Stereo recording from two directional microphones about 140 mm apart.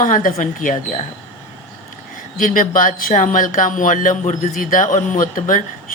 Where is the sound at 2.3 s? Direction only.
75° left (ahead or behind).